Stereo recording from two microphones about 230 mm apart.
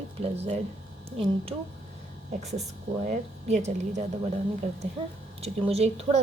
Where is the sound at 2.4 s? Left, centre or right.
Right.